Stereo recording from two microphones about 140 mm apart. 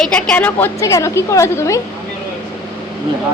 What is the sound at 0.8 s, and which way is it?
A woman's voice, 25° left (ahead or behind).